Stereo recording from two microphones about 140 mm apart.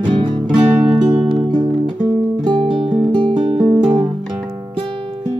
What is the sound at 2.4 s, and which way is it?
Music, 40° right (ahead or behind).